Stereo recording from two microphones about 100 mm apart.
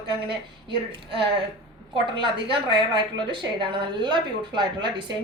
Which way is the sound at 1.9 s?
55° right (ahead or behind).